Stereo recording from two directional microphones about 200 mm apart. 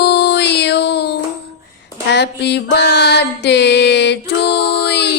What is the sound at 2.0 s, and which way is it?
Music, 60° left (ahead or behind).